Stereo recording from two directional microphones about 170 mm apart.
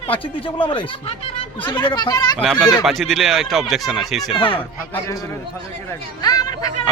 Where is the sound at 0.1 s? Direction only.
30° left (ahead or behind).